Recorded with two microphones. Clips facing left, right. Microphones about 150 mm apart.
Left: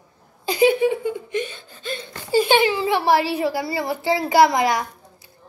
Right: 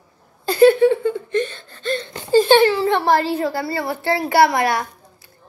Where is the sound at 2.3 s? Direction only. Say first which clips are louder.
Right 4 dB; 10° left (ahead or behind).